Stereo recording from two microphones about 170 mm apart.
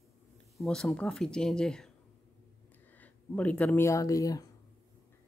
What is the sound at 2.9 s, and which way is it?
Speech, 10° left (ahead or behind).